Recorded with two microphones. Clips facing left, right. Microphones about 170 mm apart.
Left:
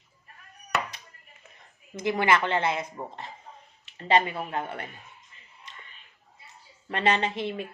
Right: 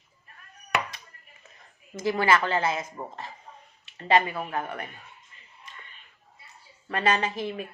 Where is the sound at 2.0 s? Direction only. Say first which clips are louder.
Right 1 dB; 20° left (ahead or behind).